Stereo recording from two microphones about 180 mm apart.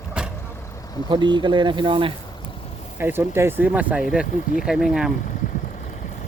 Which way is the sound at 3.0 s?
10° right (ahead or behind).